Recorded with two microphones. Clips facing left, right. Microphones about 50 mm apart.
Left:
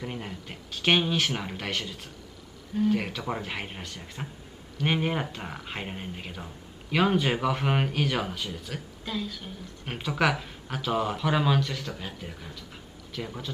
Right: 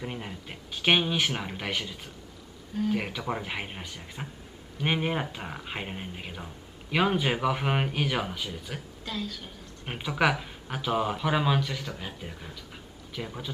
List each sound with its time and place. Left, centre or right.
0.0 s speech: centre
9.0 s speech: centre
9.8 s speech: centre
12.1 s speech: right
13.2 s speech: centre